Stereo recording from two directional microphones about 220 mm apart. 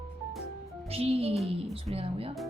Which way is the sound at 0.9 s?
25° right (ahead or behind).